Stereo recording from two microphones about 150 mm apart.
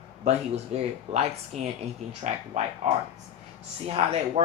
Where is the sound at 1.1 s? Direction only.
45° right (ahead or behind).